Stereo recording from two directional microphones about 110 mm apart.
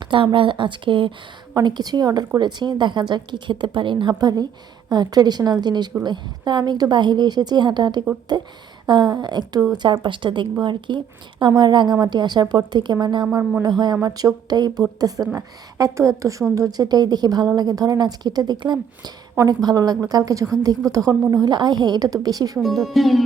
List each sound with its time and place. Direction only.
0.0 s a woman's voice: 45° right (ahead or behind)
1.6 s a woman's voice: 40° right (ahead or behind)
4.2 s a woman's voice: 35° right (ahead or behind)
22.6 s speech: centre (ahead or behind)